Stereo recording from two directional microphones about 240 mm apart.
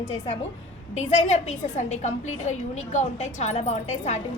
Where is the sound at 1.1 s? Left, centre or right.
Left.